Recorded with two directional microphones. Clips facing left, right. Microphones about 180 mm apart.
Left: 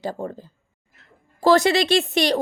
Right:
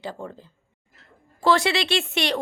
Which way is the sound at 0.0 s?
40° left (ahead or behind).